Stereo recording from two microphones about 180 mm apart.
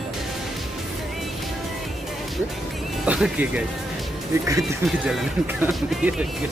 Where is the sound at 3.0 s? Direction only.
5° right (ahead or behind).